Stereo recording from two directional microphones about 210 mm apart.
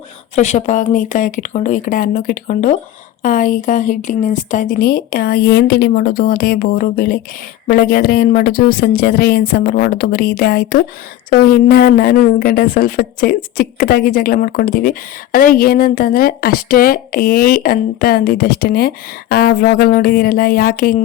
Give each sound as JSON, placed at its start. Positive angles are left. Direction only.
{"t": 0.3, "sound": "a woman's voice", "side_deg": 35}